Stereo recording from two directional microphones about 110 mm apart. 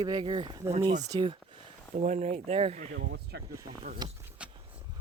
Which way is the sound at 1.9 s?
90° right.